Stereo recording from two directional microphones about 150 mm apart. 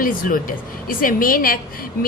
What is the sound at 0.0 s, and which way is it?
A woman's voice, 70° left (ahead or behind).